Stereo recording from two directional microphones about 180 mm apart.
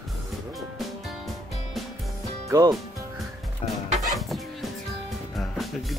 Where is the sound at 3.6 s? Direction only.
35° left (ahead or behind).